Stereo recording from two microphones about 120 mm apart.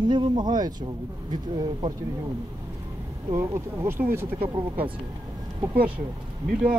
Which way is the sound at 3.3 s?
20° right (ahead or behind).